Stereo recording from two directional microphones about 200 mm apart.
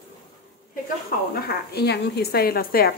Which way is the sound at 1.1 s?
45° left (ahead or behind).